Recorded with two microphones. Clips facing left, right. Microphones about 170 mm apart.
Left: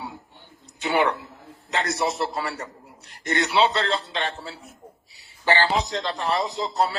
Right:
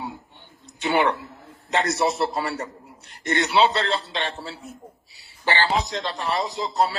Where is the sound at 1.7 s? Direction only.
25° right (ahead or behind).